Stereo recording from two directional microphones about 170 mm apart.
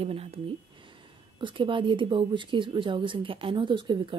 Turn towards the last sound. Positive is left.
turn(degrees=-30)  # may be behind; listen again after turning